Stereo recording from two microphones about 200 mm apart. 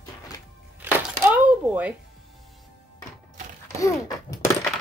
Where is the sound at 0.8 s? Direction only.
10° right (ahead or behind).